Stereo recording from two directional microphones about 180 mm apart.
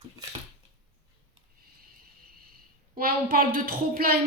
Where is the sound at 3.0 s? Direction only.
55° right (ahead or behind).